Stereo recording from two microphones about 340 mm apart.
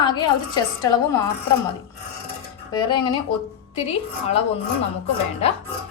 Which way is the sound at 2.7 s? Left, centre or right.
Centre.